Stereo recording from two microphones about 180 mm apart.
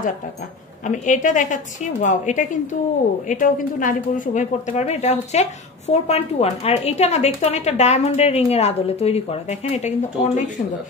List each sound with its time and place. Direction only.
0.8 s a woman's voice: 45° left (ahead or behind)